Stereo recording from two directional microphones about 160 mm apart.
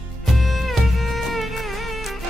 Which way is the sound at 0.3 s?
Centre (ahead or behind).